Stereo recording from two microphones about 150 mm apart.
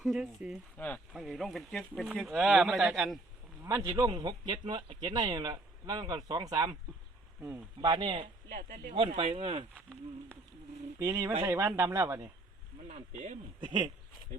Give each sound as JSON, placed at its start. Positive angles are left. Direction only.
{"t": 0.0, "sound": "speech", "side_deg": -5}
{"t": 0.8, "sound": "speech", "side_deg": 10}
{"t": 1.1, "sound": "speech", "side_deg": 0}
{"t": 3.6, "sound": "a man's voice", "side_deg": -20}
{"t": 7.8, "sound": "a man's voice", "side_deg": -30}
{"t": 8.4, "sound": "speech", "side_deg": -70}
{"t": 9.0, "sound": "speech", "side_deg": -40}
{"t": 9.7, "sound": "speech", "side_deg": 10}
{"t": 11.0, "sound": "speech", "side_deg": -15}
{"t": 12.9, "sound": "speech", "side_deg": -50}
{"t": 13.6, "sound": "speech", "side_deg": -30}